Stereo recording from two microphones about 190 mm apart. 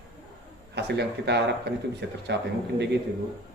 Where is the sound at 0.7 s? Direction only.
60° right (ahead or behind).